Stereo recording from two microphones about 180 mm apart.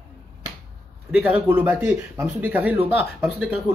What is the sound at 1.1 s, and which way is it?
Speech, 5° right (ahead or behind).